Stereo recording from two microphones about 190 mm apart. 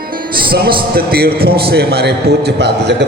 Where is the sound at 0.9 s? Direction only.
55° right (ahead or behind).